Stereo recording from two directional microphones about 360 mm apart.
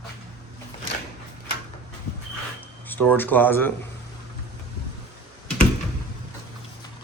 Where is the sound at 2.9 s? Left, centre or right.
Centre.